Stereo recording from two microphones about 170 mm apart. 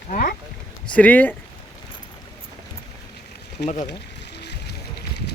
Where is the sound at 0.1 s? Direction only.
55° left (ahead or behind).